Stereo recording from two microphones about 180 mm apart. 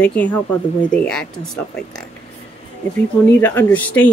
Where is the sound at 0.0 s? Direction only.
10° left (ahead or behind).